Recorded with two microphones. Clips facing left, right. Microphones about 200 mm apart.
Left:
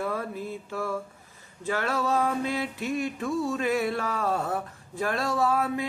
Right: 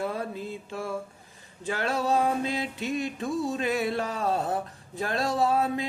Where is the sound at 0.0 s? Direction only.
25° right (ahead or behind).